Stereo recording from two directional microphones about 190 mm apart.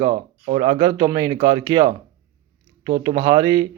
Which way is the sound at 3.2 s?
20° right (ahead or behind).